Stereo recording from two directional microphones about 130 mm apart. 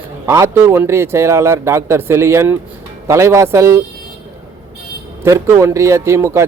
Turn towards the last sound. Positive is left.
turn(degrees=-20)  # may be behind; listen again after turning